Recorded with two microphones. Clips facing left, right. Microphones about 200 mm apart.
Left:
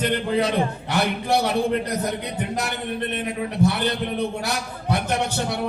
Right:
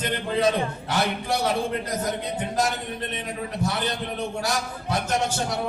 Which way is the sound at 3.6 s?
65° left (ahead or behind).